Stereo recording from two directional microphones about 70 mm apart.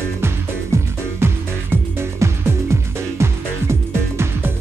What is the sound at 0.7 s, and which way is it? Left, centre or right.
Music, right.